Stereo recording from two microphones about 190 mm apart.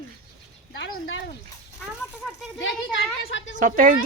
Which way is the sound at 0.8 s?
90° left.